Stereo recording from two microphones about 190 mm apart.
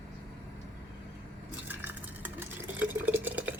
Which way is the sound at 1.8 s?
10° right (ahead or behind).